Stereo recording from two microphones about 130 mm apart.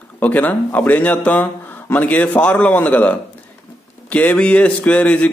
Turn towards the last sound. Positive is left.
turn(degrees=10)  # may be behind; listen again after turning